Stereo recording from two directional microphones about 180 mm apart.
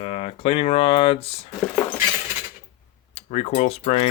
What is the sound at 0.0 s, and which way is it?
Speech, 35° left (ahead or behind).